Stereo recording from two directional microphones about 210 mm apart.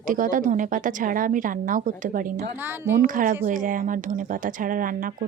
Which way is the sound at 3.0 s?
40° right (ahead or behind).